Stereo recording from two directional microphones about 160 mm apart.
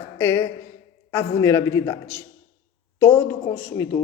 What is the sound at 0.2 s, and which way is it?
Speech, 15° left (ahead or behind).